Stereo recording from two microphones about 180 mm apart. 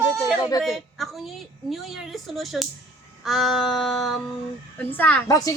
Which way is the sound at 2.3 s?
Centre (ahead or behind).